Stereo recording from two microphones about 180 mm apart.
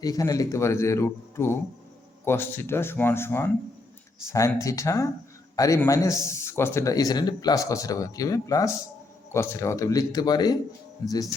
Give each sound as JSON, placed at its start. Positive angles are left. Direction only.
{"t": 0.0, "sound": "speech", "side_deg": 20}